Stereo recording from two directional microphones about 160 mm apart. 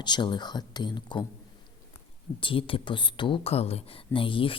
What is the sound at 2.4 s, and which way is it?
Speech, 35° left (ahead or behind).